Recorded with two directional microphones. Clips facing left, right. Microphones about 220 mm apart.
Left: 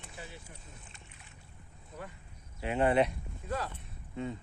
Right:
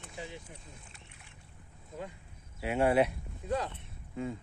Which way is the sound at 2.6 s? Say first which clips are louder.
Right 1 dB; 5° right (ahead or behind).